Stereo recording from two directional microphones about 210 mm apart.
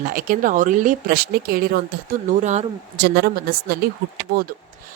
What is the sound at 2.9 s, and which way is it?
Speech, 50° right (ahead or behind).